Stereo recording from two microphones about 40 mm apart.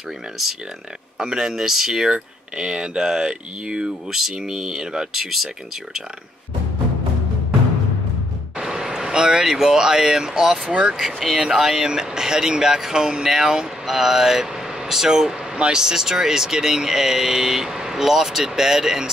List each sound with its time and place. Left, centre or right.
1.2 s speech: centre
8.5 s speech: centre
11.0 s speech: centre
15.5 s speech: right
15.8 s speech: centre